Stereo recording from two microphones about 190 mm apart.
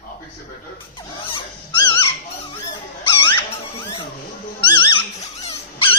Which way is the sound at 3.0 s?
25° left (ahead or behind).